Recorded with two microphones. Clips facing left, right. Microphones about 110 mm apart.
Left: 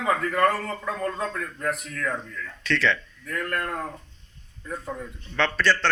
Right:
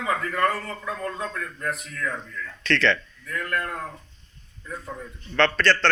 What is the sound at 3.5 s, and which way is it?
Speech, 50° left (ahead or behind).